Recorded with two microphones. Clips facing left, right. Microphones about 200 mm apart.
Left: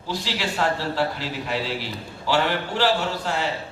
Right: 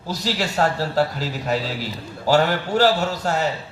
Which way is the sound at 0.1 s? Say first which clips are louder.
Right 3 dB; 40° right (ahead or behind).